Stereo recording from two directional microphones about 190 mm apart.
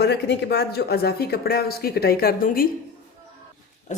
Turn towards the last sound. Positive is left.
turn(degrees=35)  # may be behind; listen again after turning